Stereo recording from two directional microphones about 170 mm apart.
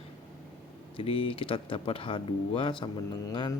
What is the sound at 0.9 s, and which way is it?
Speech, 35° left (ahead or behind).